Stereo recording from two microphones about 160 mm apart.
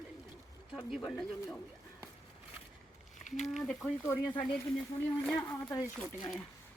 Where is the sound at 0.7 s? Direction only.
Centre (ahead or behind).